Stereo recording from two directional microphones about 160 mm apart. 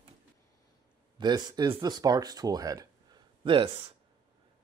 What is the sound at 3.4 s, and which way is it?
Speech, 30° right (ahead or behind).